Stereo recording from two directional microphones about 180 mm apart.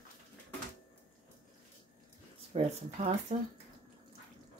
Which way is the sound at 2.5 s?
35° right (ahead or behind).